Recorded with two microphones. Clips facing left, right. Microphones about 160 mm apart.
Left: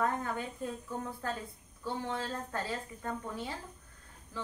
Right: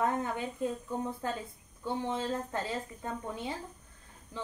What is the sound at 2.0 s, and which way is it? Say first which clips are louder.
A woman's voice: right 4 dB; 20° right (ahead or behind).